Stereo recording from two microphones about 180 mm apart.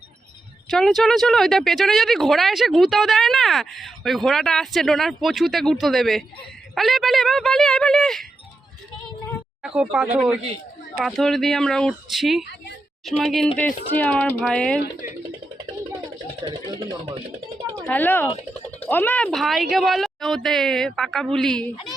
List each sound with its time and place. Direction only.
0.7 s speech: centre (ahead or behind)
9.6 s speech: 5° right (ahead or behind)
15.0 s speech: 45° left (ahead or behind)
16.7 s speech: 20° right (ahead or behind)
17.8 s speech: 10° left (ahead or behind)